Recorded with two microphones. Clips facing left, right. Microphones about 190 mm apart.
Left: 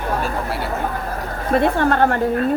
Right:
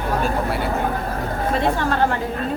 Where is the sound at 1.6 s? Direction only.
55° left (ahead or behind).